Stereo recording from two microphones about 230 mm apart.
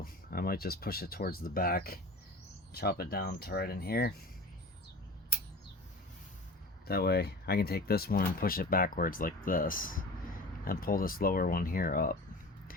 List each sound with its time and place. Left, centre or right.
0.0 s speech: left
6.8 s speech: left